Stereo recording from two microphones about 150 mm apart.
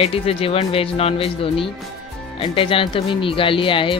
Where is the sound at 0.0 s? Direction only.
40° left (ahead or behind).